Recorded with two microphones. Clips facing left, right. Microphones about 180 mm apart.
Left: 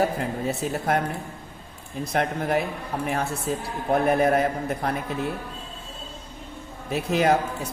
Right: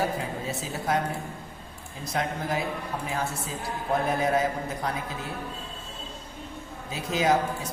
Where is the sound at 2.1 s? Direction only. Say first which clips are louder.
Left 5 dB; 60° left (ahead or behind).